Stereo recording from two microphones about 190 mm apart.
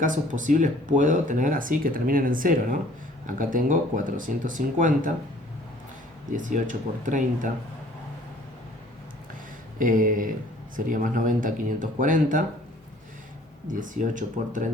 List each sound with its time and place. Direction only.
0.0 s speech: 40° right (ahead or behind)
6.3 s speech: 40° right (ahead or behind)
9.7 s speech: 45° right (ahead or behind)
13.7 s speech: 45° right (ahead or behind)